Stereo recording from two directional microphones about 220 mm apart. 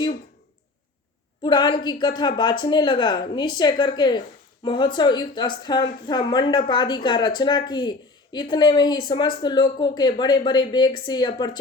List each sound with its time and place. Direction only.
1.5 s a woman's voice: 20° left (ahead or behind)